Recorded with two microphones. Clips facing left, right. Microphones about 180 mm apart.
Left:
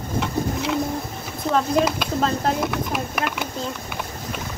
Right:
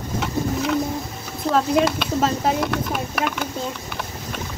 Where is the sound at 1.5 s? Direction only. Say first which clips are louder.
Right 1 dB; 5° right (ahead or behind).